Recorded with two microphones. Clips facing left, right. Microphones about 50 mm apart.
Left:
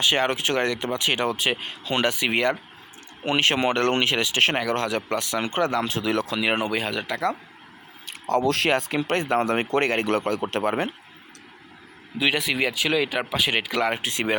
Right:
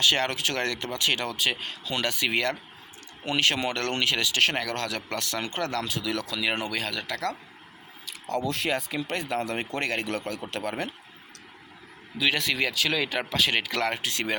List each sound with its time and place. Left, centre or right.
0.0 s speech: left
8.0 s speech: left
10.6 s speech: left
12.3 s speech: centre